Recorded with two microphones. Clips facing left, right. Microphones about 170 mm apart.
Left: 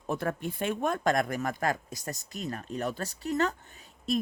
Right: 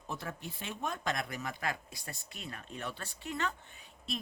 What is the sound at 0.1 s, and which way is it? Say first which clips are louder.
Speech: left 10 dB; 55° left (ahead or behind).